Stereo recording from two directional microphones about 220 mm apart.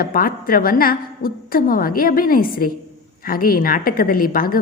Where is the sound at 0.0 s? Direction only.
40° left (ahead or behind).